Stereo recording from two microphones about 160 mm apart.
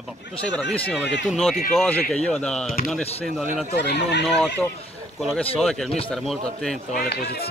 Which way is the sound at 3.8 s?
90° left.